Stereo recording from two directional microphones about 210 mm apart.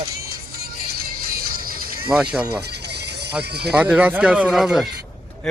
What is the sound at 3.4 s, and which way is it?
Speech, 50° right (ahead or behind).